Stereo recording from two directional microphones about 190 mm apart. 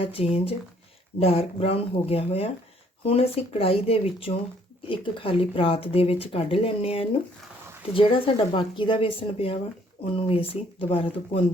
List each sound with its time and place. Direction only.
0.0 s speech: 30° left (ahead or behind)